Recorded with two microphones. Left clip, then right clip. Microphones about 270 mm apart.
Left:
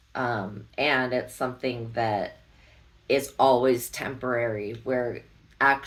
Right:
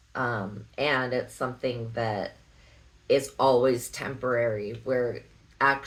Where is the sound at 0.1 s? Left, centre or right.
Centre.